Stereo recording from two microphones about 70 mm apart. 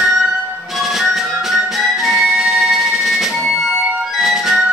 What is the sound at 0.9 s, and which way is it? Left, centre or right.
Music, centre.